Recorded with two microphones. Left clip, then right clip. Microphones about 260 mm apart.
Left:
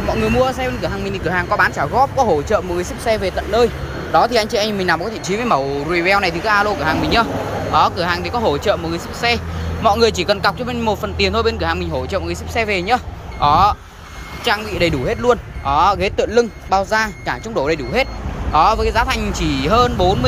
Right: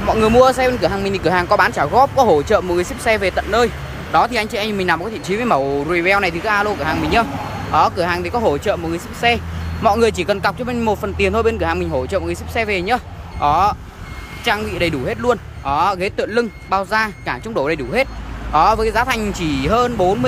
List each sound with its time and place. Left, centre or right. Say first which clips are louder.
0.1 s speech: right 5 dB; centre